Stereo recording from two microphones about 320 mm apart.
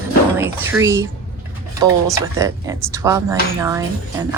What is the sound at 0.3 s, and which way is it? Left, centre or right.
Speech, centre.